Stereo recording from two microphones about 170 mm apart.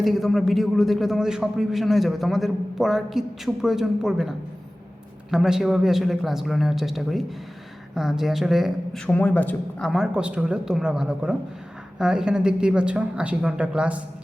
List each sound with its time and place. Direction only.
0.0 s a man's voice: centre (ahead or behind)